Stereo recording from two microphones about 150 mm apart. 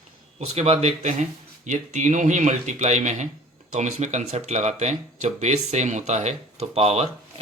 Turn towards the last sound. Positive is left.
turn(degrees=-45)  # may be behind; listen again after turning